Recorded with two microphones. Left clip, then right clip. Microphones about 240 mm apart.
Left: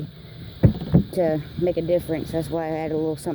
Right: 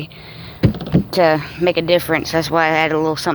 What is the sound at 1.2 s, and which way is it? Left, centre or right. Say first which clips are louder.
Speech: right 10 dB; right.